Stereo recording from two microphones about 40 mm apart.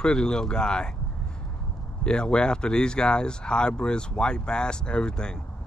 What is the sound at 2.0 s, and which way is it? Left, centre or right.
Speech, left.